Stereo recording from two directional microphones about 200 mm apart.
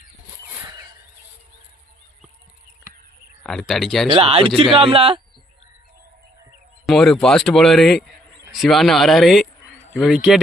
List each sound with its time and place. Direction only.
3.4 s speech: centre (ahead or behind)
4.1 s speech: 30° right (ahead or behind)
6.8 s speech: centre (ahead or behind)